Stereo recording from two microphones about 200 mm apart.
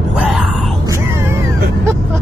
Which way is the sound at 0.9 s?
15° right (ahead or behind).